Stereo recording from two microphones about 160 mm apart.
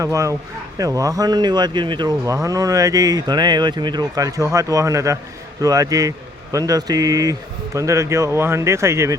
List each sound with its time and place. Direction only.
0.0 s speech: 20° right (ahead or behind)